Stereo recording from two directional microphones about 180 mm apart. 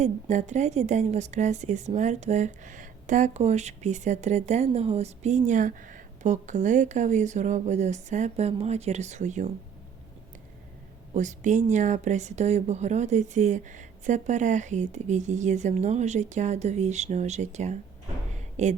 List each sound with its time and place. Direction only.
0.0 s a woman's voice: 40° right (ahead or behind)
11.1 s a woman's voice: 40° right (ahead or behind)
18.3 s a sound: 40° right (ahead or behind)